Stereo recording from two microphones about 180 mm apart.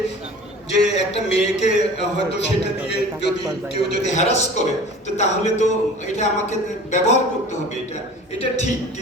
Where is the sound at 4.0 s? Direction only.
40° left (ahead or behind).